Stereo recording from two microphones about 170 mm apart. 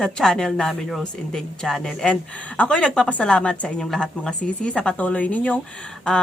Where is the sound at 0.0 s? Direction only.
5° left (ahead or behind).